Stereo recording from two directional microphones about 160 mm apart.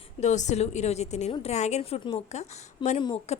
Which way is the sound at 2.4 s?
45° left (ahead or behind).